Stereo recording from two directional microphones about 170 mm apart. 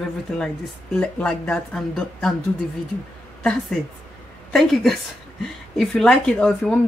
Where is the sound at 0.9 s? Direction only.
5° left (ahead or behind).